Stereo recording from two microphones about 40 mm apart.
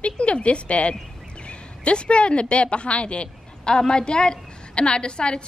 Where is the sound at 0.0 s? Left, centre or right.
Left.